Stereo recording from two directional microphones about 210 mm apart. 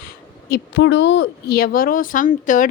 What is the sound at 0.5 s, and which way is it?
Speech, 55° left (ahead or behind).